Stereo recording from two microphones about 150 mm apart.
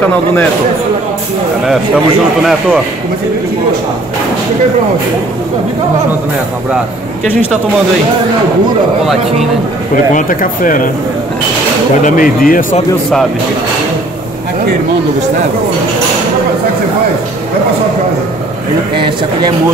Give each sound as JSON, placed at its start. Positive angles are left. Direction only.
{"t": 10.1, "sound": "speech", "side_deg": 65}
{"t": 12.0, "sound": "speech", "side_deg": 65}
{"t": 18.9, "sound": "speech", "side_deg": -30}